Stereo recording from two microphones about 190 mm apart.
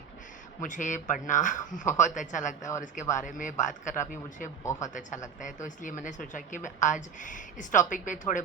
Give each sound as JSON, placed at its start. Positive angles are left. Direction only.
{"t": 0.6, "sound": "speech", "side_deg": 40}